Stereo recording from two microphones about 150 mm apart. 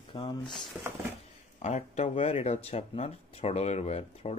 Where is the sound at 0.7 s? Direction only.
10° right (ahead or behind).